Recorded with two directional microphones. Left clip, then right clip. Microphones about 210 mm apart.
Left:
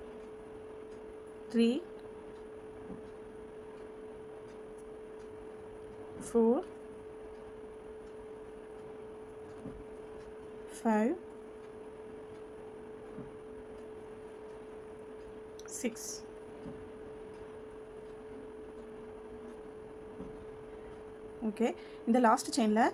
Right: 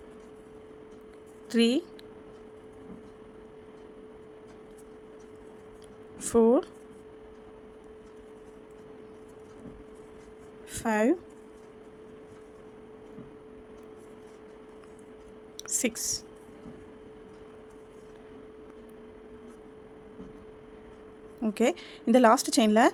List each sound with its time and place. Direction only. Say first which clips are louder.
1.5 s a woman's voice: right 5 dB; 50° right (ahead or behind)
6.2 s speech: right 7 dB; 50° right (ahead or behind)
10.8 s a woman's voice: right 5 dB; 50° right (ahead or behind)
15.7 s speech: right 9 dB; 50° right (ahead or behind)
21.5 s a woman's voice: right 7 dB; 50° right (ahead or behind)